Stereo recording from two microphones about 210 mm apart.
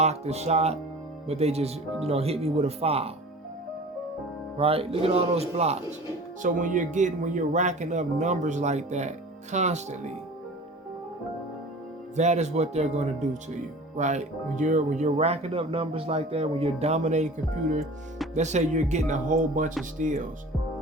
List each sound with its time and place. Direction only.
0.0 s speech: 30° right (ahead or behind)
4.5 s speech: 25° right (ahead or behind)
12.1 s speech: 30° right (ahead or behind)